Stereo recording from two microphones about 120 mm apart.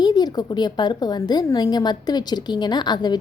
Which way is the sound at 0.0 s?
35° left (ahead or behind).